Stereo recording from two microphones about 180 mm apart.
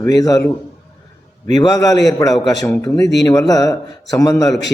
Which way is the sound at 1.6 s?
20° left (ahead or behind).